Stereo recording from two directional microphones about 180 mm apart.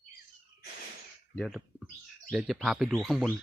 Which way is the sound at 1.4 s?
Centre (ahead or behind).